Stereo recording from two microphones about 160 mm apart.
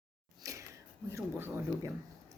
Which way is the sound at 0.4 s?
20° right (ahead or behind).